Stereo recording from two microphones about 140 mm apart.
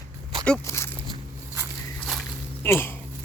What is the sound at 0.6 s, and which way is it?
Walk, 20° left (ahead or behind).